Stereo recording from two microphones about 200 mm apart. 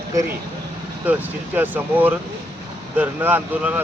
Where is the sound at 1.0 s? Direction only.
10° right (ahead or behind).